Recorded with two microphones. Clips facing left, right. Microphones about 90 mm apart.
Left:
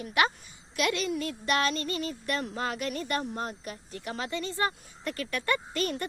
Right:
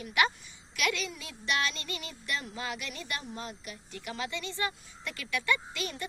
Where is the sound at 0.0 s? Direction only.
35° left (ahead or behind).